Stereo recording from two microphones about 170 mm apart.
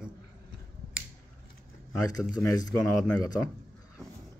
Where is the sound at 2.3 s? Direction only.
20° left (ahead or behind).